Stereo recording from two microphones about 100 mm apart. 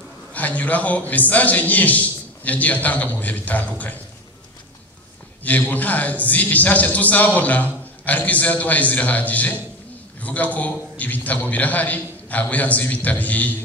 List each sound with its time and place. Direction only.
0.3 s a man's voice: 15° left (ahead or behind)
5.4 s a man's voice: 15° left (ahead or behind)